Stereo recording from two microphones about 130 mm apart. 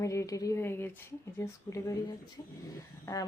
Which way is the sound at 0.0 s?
25° left (ahead or behind).